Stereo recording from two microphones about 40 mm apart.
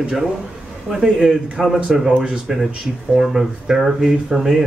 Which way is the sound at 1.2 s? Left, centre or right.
Centre.